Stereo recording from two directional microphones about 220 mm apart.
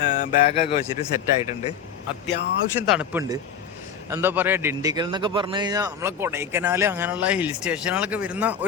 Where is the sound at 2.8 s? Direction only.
5° right (ahead or behind).